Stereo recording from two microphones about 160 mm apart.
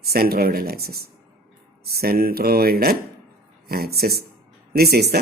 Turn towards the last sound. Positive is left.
turn(degrees=-80)